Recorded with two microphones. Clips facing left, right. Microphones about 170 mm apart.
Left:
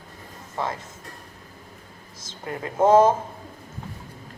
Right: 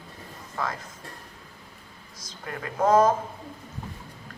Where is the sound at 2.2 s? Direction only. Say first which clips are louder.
Left 4 dB; 25° left (ahead or behind).